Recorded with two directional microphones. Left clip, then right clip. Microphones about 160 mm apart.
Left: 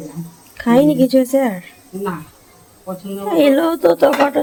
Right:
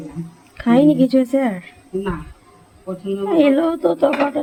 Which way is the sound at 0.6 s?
20° left (ahead or behind).